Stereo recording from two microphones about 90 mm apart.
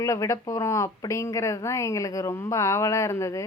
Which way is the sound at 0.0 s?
35° left (ahead or behind).